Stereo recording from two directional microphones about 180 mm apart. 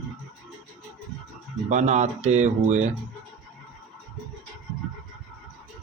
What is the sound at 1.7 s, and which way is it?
Speech, 40° right (ahead or behind).